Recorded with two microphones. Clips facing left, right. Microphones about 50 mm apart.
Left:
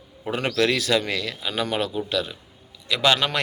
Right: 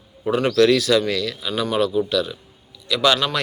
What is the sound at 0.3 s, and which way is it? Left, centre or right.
Speech, left.